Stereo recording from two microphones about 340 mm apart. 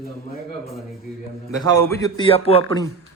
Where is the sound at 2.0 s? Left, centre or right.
Centre.